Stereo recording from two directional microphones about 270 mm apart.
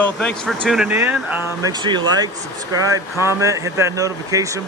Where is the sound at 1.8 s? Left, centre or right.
Centre.